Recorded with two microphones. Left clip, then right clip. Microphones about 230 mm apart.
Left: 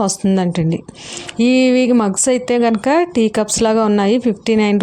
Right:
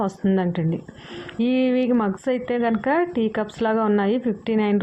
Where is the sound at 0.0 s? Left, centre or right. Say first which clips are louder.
Left 6 dB; left.